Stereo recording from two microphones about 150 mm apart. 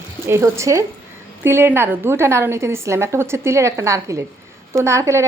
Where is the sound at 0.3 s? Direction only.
20° right (ahead or behind).